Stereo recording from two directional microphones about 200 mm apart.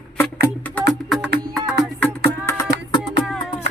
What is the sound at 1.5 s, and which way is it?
Music, centre (ahead or behind).